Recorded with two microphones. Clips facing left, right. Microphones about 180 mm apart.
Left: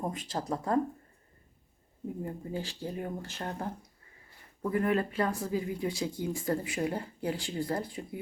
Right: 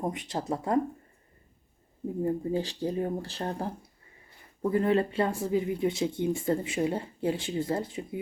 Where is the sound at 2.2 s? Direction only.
30° right (ahead or behind).